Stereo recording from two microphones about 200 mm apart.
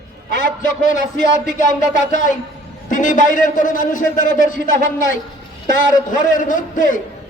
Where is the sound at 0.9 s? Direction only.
40° left (ahead or behind).